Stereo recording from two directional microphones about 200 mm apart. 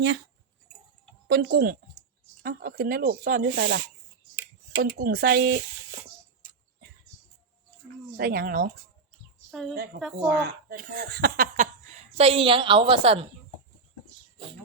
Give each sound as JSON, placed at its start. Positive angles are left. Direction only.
{"t": 1.3, "sound": "speech", "side_deg": -55}
{"t": 4.8, "sound": "speech", "side_deg": -45}
{"t": 8.1, "sound": "speech", "side_deg": -50}
{"t": 9.5, "sound": "a woman's voice", "side_deg": 0}
{"t": 9.7, "sound": "speech", "side_deg": -50}
{"t": 12.1, "sound": "a woman's voice", "side_deg": -30}